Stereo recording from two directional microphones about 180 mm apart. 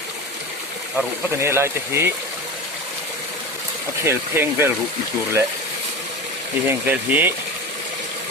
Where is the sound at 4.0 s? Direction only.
15° right (ahead or behind).